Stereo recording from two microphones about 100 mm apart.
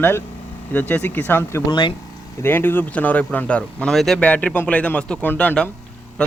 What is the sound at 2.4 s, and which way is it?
Speech, 20° left (ahead or behind).